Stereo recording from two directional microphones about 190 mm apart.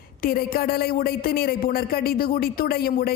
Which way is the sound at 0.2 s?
50° left (ahead or behind).